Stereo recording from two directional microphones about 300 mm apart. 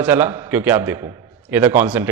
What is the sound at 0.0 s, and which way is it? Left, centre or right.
A man's voice, centre.